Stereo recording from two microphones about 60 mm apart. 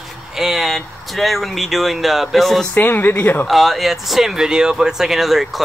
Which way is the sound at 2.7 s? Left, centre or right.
Left.